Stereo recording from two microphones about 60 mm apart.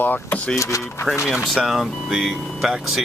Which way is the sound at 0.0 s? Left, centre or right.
Left.